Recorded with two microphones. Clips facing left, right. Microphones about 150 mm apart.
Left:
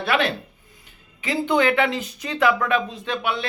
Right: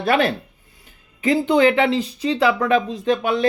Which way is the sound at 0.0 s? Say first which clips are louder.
Right 4 dB; 40° right (ahead or behind).